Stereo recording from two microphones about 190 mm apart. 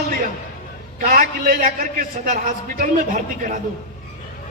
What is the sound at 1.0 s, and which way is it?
A man's voice, 50° right (ahead or behind).